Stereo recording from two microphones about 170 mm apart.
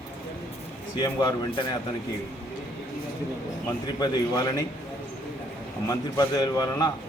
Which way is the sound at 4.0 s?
20° left (ahead or behind).